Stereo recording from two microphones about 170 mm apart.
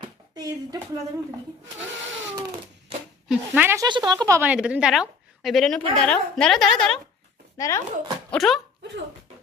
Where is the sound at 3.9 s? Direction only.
25° right (ahead or behind).